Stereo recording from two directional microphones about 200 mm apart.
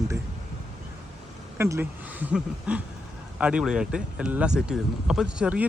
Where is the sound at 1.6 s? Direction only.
15° right (ahead or behind).